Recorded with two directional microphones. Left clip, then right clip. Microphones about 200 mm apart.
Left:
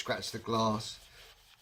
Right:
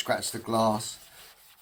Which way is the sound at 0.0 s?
20° left (ahead or behind).